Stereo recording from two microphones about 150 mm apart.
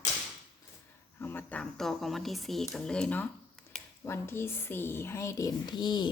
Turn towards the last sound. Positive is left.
turn(degrees=30)  # may be behind; listen again after turning